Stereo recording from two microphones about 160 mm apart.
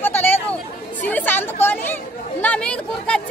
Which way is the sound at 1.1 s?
10° left (ahead or behind).